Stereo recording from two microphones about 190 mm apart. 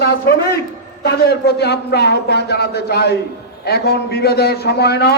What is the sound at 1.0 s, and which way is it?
A man's voice, 60° left (ahead or behind).